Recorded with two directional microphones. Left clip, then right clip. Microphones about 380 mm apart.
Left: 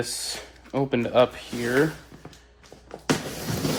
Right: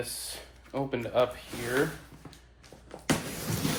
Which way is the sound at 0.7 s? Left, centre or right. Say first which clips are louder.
Left 7 dB; left.